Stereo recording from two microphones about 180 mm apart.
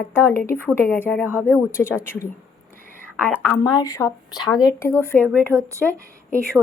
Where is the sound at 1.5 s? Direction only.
15° left (ahead or behind).